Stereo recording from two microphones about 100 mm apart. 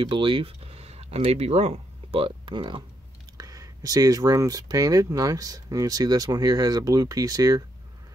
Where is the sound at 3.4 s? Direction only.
35° right (ahead or behind).